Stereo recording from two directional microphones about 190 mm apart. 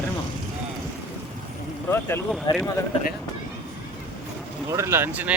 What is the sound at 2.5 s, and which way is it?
Speech, 25° left (ahead or behind).